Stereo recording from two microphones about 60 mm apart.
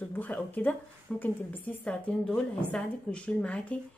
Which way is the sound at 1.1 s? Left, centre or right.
Centre.